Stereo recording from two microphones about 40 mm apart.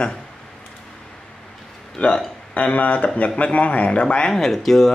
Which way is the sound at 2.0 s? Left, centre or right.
Left.